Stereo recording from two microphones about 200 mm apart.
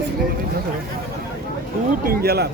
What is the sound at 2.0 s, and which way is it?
Speech, 50° right (ahead or behind).